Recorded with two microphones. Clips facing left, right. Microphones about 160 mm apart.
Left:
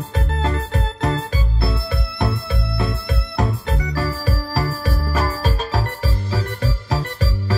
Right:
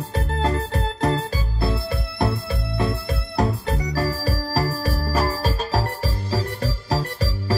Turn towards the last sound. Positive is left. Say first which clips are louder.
# even
turn(degrees=-40)  # may be behind; listen again after turning